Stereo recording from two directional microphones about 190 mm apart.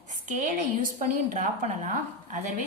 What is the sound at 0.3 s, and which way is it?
A woman's voice, 40° right (ahead or behind).